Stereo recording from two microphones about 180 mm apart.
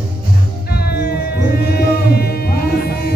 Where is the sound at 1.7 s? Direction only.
60° left (ahead or behind).